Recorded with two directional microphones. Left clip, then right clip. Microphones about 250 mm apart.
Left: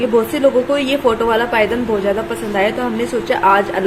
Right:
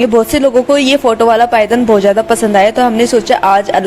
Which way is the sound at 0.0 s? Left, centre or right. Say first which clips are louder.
Right 4 dB; right.